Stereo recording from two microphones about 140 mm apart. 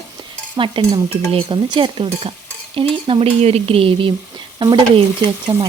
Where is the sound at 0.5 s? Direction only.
35° right (ahead or behind).